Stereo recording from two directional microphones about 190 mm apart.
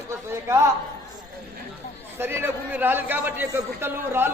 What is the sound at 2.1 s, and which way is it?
A man's voice, 10° right (ahead or behind).